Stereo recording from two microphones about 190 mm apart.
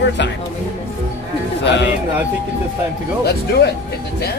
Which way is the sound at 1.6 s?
65° left (ahead or behind).